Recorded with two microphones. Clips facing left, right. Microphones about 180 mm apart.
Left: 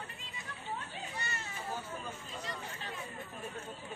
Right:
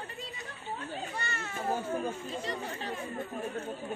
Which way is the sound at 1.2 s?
55° right (ahead or behind).